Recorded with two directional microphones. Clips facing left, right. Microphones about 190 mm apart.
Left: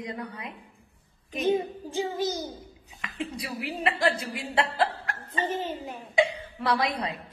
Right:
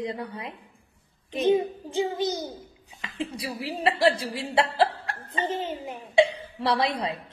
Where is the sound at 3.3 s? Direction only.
30° right (ahead or behind).